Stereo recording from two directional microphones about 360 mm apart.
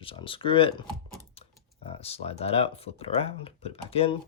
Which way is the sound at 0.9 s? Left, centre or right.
Centre.